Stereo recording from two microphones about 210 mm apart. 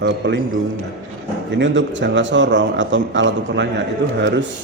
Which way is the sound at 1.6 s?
60° right (ahead or behind).